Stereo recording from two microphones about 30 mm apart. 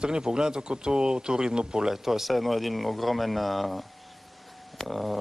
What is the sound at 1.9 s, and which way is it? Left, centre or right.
Speech, centre.